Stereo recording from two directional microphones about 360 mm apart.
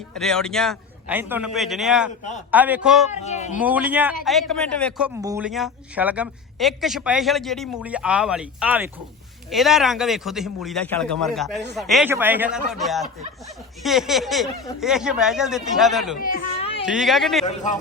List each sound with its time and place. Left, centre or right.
0.1 s speech: centre
3.1 s speech: centre
3.6 s speech: centre
16.2 s a sound: left
16.8 s speech: centre
17.4 s speech: centre